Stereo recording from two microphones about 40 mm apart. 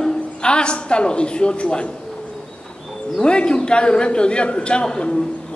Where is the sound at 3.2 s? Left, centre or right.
Left.